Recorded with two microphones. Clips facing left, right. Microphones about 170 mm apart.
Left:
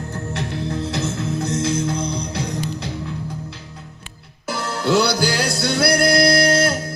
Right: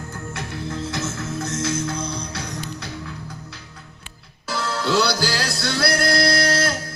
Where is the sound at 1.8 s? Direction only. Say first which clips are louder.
Left 4 dB; 30° left (ahead or behind).